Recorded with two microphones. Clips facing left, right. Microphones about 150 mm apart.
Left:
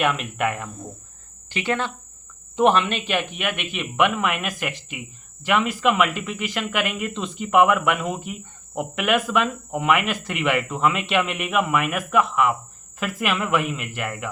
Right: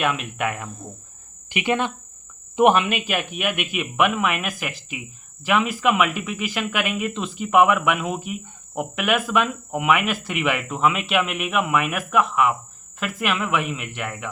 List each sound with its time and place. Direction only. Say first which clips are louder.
0.0 s speech: left 1 dB; centre (ahead or behind)
1.5 s speech: right 2 dB; 15° right (ahead or behind); by 14.3 s centre (ahead or behind)